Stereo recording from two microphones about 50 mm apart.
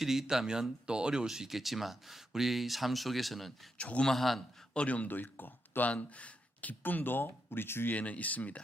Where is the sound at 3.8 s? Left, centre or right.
Left.